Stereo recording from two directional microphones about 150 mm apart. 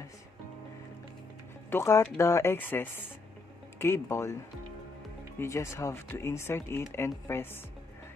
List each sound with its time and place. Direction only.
1.7 s speech: 15° left (ahead or behind)
5.4 s speech: 20° left (ahead or behind)